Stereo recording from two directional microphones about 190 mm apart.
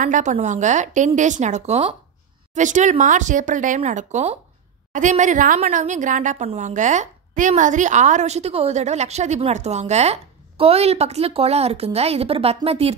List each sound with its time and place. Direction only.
0.0 s a woman's voice: 40° right (ahead or behind)